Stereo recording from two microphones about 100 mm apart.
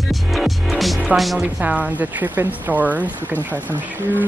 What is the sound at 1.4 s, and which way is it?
Speech, 15° right (ahead or behind).